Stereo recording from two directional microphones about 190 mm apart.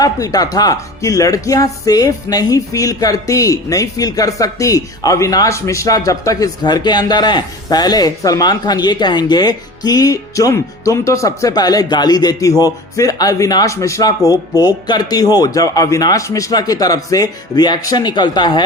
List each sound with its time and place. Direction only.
0.0 s speech: 20° left (ahead or behind)